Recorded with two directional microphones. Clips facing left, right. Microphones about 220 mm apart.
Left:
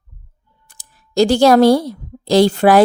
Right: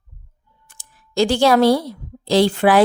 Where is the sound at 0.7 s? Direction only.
40° left (ahead or behind).